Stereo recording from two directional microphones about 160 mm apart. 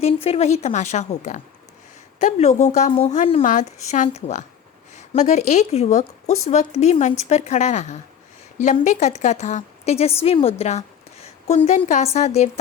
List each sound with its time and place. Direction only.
0.0 s a woman's voice: 40° left (ahead or behind)